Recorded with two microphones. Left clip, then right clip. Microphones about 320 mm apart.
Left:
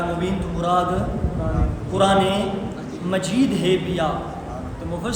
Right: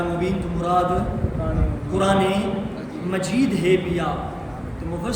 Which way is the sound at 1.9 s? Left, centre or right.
Centre.